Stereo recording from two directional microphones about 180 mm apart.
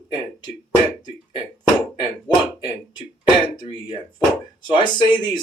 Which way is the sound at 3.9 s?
25° left (ahead or behind).